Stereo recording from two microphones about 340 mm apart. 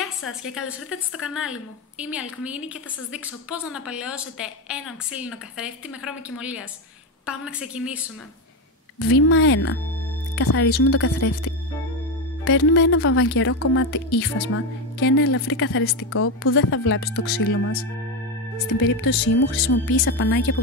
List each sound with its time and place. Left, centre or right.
0.3 s a woman's voice: centre
9.0 s speech: left
18.8 s speech: left
19.3 s speech: left